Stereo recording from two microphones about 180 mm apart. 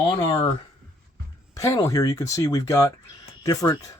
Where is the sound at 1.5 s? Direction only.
20° left (ahead or behind).